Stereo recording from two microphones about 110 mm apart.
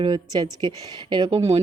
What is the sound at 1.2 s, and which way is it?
Speech, 75° right (ahead or behind).